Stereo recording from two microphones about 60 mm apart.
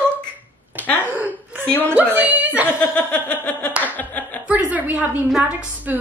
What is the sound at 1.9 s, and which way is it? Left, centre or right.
Speech, right.